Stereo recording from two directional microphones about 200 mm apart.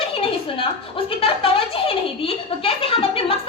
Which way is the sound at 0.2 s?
25° left (ahead or behind).